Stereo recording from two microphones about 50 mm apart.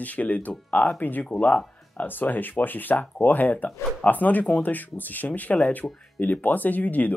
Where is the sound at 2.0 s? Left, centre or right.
Left.